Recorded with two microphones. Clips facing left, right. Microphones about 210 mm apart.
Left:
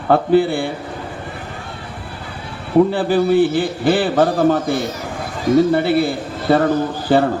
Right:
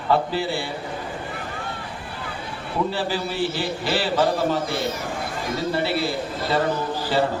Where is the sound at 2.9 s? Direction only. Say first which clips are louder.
Left 11 dB; 55° left (ahead or behind).